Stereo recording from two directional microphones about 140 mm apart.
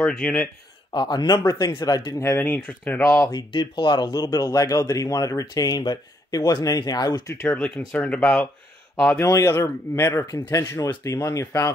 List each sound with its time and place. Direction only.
0.0 s speech: 10° left (ahead or behind)
0.9 s speech: 30° left (ahead or behind); by 3.0 s 10° left (ahead or behind)
3.0 s speech: 25° left (ahead or behind)
7.4 s speech: 10° left (ahead or behind)
9.3 s speech: 20° left (ahead or behind)